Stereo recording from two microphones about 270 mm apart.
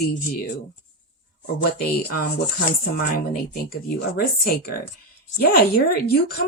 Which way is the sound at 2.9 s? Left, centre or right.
Left.